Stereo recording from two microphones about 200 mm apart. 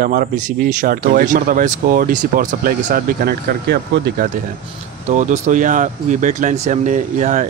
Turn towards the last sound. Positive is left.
turn(degrees=-40)  # may be behind; listen again after turning